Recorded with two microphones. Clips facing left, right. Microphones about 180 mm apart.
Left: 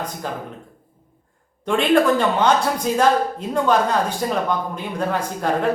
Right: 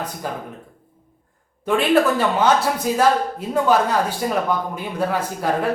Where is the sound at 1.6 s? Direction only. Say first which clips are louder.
Even; 5° right (ahead or behind).